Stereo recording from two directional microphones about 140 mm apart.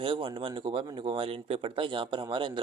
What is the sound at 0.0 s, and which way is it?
Speech, 35° right (ahead or behind).